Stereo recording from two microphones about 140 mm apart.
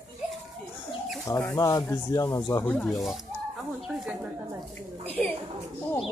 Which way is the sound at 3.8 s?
5° right (ahead or behind).